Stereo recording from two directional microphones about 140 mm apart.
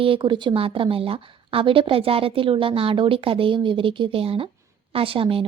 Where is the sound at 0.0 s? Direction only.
35° right (ahead or behind).